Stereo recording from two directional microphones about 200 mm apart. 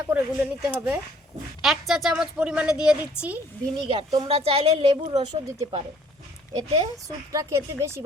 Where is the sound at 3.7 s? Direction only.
25° right (ahead or behind).